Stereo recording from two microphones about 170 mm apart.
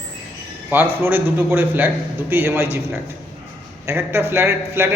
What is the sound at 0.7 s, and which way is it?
A man's voice, 10° right (ahead or behind).